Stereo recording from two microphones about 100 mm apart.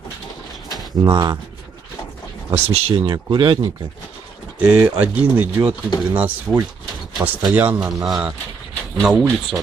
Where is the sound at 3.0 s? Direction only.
40° right (ahead or behind).